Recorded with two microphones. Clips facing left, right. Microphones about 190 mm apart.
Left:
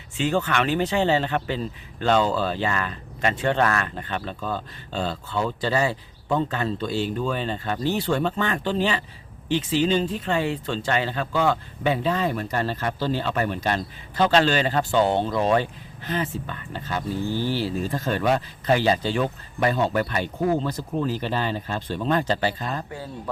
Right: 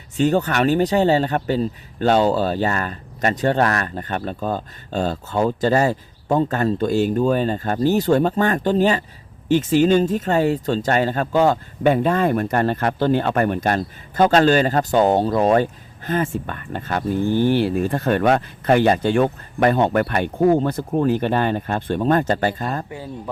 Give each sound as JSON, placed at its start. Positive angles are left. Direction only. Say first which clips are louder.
{"t": 0.2, "sound": "speech", "louder": "right 5 dB", "side_deg": -40}
{"t": 22.9, "sound": "speech", "louder": "right 3 dB", "side_deg": -15}